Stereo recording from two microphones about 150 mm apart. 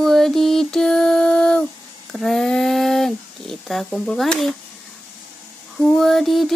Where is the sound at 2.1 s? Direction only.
Centre (ahead or behind).